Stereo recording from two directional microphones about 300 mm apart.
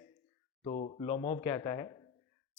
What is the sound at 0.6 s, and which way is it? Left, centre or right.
A man's voice, left.